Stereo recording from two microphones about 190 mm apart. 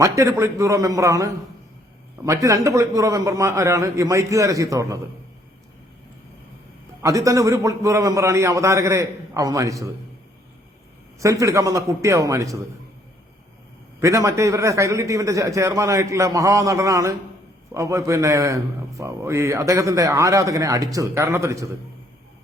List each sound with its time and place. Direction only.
0.0 s a man's voice: 15° right (ahead or behind)
7.0 s a man's voice: 15° right (ahead or behind)
11.2 s a man's voice: 15° right (ahead or behind)
14.0 s a man's voice: 15° right (ahead or behind)